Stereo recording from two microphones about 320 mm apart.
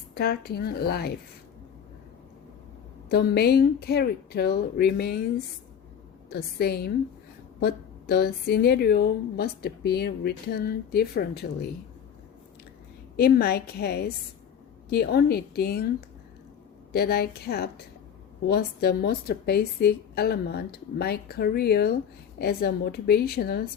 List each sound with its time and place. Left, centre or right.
0.1 s a woman's voice: left
3.1 s a woman's voice: left
6.3 s a woman's voice: left
13.1 s a woman's voice: left